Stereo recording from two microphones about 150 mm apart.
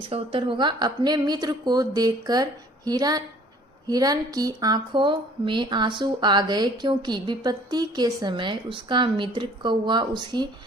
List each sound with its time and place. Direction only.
0.1 s speech: 35° right (ahead or behind)